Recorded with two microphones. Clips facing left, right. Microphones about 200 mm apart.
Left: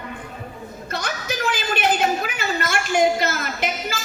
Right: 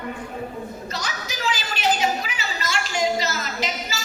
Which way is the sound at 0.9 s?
55° left (ahead or behind).